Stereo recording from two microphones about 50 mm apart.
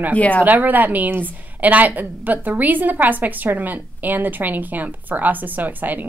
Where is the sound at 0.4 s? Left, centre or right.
Right.